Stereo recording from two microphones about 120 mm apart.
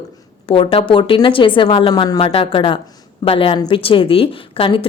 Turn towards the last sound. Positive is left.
turn(degrees=50)  # may be behind; listen again after turning